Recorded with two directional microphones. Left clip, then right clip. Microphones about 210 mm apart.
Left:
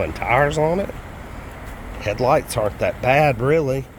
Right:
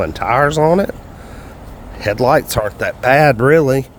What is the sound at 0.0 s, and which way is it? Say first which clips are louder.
Speech: right 4 dB; 30° right (ahead or behind).